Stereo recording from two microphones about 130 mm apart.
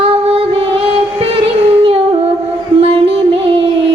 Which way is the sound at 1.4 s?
45° right (ahead or behind).